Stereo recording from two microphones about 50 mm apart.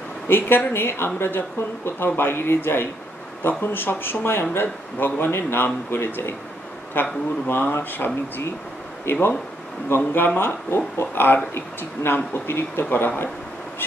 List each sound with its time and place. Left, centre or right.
0.3 s speech: left
0.7 s speech: left